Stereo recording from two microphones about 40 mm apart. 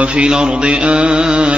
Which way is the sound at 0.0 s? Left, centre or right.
Right.